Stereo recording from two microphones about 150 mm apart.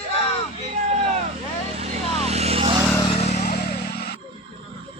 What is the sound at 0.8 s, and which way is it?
Vehicle, 50° right (ahead or behind).